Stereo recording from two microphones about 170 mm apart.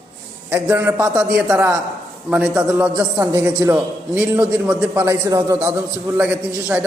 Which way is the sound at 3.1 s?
20° right (ahead or behind).